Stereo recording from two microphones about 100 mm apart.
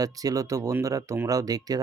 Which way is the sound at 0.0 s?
35° right (ahead or behind).